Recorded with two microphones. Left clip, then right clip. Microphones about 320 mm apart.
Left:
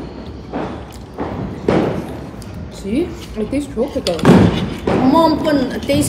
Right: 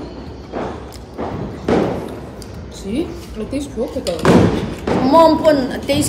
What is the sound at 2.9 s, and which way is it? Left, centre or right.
A woman's voice, left.